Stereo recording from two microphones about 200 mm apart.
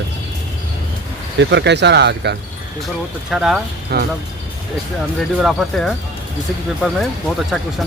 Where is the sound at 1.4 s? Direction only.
60° right (ahead or behind).